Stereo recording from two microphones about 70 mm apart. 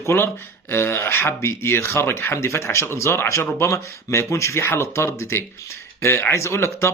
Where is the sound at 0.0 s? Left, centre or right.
Left.